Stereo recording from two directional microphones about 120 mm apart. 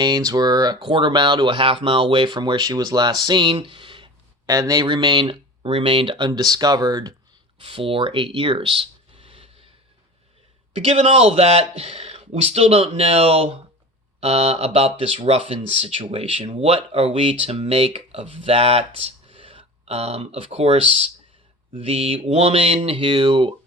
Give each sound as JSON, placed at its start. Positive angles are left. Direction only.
{"t": 0.0, "sound": "speech", "side_deg": -35}
{"t": 4.4, "sound": "speech", "side_deg": -30}
{"t": 7.6, "sound": "speech", "side_deg": -50}
{"t": 10.8, "sound": "speech", "side_deg": -55}